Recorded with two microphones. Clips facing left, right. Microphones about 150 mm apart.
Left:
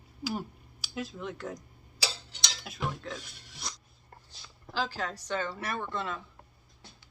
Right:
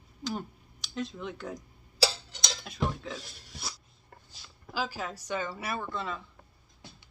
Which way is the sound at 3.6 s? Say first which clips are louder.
Even; 5° right (ahead or behind).